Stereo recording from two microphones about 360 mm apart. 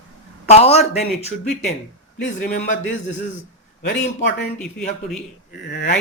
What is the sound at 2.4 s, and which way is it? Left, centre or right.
Speech, left.